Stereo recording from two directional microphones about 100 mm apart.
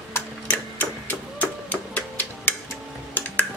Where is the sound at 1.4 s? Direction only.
15° left (ahead or behind).